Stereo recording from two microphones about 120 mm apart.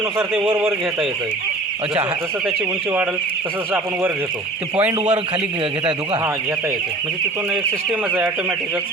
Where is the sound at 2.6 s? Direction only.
15° right (ahead or behind).